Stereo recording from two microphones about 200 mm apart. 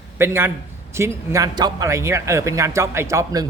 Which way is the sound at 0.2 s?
10° right (ahead or behind).